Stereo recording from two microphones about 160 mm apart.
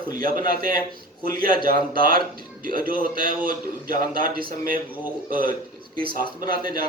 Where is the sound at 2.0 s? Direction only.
65° right (ahead or behind).